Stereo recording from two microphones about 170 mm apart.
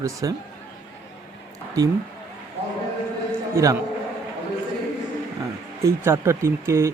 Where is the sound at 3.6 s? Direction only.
15° right (ahead or behind).